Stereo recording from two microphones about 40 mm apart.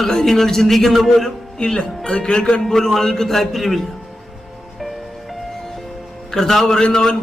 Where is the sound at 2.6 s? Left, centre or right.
Centre.